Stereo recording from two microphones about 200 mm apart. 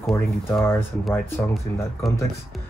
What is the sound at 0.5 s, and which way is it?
Speech, 10° left (ahead or behind).